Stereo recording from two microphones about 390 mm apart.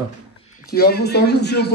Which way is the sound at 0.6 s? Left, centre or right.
Left.